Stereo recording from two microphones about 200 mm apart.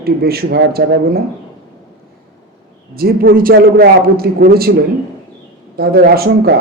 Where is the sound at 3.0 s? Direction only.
50° right (ahead or behind).